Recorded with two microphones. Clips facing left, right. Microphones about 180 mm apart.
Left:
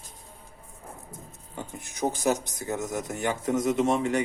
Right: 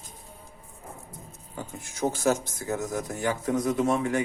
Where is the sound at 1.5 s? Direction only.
15° left (ahead or behind).